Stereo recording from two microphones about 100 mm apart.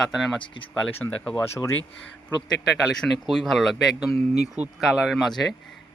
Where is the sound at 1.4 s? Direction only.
25° left (ahead or behind).